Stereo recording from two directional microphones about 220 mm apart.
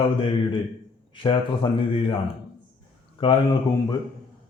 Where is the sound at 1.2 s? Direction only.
25° left (ahead or behind).